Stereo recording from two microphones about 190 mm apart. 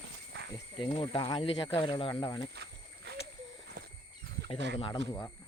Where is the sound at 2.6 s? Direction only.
60° right (ahead or behind).